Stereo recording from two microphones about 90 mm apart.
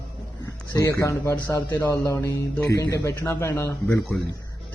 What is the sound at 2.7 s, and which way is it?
Speech, 35° left (ahead or behind).